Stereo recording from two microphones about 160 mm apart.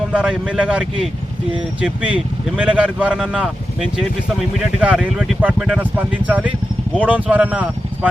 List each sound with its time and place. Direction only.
0.1 s speech: 5° right (ahead or behind)